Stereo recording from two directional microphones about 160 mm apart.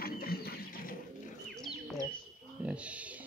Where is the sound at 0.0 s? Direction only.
70° left (ahead or behind).